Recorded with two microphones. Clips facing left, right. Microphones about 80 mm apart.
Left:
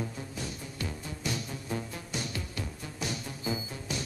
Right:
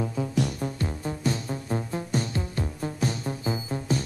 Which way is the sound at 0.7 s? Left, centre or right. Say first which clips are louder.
Right 7 dB; right.